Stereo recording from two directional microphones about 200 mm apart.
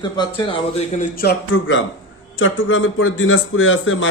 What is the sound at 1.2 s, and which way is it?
Speech, 70° left (ahead or behind).